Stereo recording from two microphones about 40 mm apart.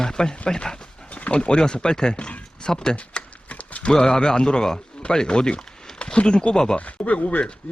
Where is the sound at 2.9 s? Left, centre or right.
Left.